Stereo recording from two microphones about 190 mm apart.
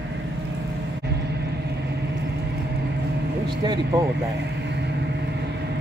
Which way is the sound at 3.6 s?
20° right (ahead or behind).